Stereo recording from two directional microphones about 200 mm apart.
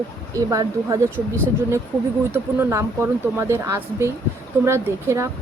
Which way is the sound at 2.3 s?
10° right (ahead or behind).